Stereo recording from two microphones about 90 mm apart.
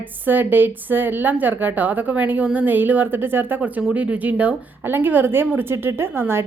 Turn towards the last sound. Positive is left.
turn(degrees=-25)  # may be behind; listen again after turning